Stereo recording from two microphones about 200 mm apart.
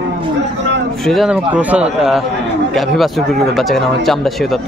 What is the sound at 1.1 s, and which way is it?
A man's voice, centre (ahead or behind).